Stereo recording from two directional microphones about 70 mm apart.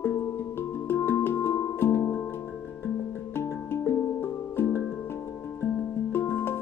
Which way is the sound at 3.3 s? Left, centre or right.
Left.